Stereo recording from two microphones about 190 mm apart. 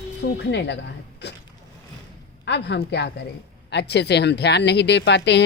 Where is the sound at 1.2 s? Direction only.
65° left (ahead or behind).